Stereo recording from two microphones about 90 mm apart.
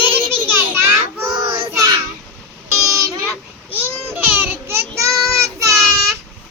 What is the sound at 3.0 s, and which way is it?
Child singing, 35° right (ahead or behind).